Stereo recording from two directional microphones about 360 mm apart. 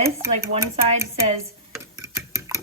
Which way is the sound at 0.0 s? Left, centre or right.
Centre.